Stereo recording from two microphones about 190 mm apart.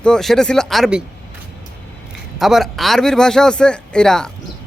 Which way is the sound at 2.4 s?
Centre (ahead or behind).